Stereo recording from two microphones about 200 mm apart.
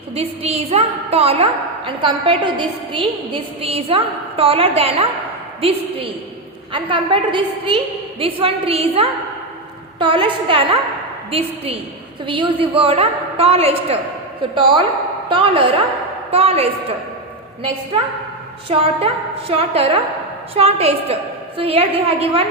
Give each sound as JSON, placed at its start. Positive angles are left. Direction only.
{"t": 0.1, "sound": "a woman's voice", "side_deg": -30}
{"t": 18.7, "sound": "a woman's voice", "side_deg": -30}